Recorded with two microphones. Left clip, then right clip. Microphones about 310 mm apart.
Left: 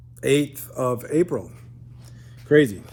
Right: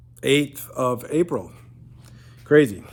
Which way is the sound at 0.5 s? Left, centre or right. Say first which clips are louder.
Right 1 dB; centre.